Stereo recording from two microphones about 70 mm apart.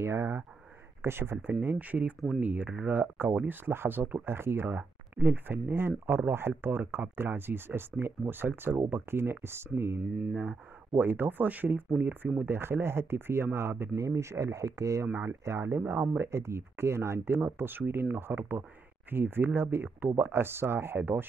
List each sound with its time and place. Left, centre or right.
0.0 s speech: right
11.0 s speech: right